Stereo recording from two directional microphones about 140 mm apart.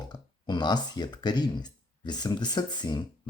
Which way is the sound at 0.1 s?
30° left (ahead or behind).